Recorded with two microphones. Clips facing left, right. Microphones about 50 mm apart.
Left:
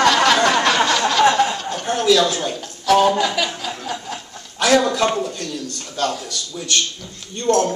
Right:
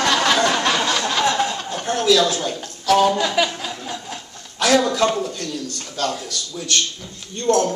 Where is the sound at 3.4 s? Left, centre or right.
Centre.